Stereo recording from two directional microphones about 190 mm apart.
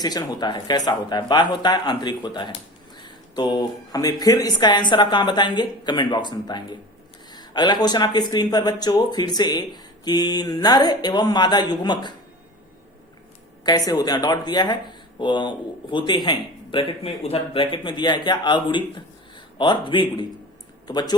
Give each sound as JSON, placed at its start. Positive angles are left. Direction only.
{"t": 0.0, "sound": "speech", "side_deg": 20}
{"t": 13.7, "sound": "speech", "side_deg": 20}